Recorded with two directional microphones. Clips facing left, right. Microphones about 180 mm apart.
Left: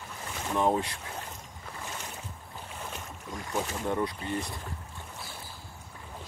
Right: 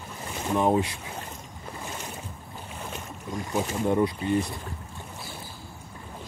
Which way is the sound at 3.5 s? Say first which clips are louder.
Right 6 dB; 15° right (ahead or behind).